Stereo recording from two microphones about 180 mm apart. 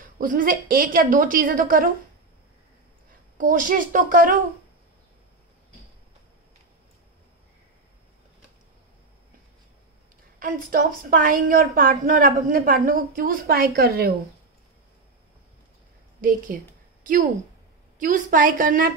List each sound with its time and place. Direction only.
0.0 s a woman's voice: 50° right (ahead or behind)
3.3 s a woman's voice: 50° right (ahead or behind)
10.4 s a woman's voice: 50° right (ahead or behind)
16.2 s a woman's voice: 50° right (ahead or behind)